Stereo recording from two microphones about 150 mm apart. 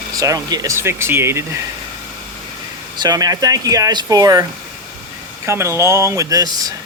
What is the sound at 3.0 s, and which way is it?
Speech, 25° right (ahead or behind).